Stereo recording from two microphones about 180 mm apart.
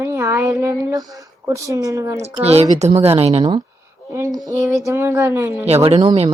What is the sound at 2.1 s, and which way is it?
Speech, 35° right (ahead or behind).